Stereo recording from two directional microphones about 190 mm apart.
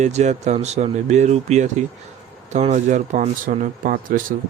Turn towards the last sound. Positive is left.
turn(degrees=-45)  # may be behind; listen again after turning